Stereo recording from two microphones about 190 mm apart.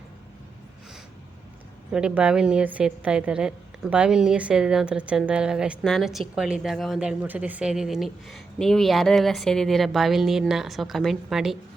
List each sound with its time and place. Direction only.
1.9 s a woman's voice: 5° right (ahead or behind)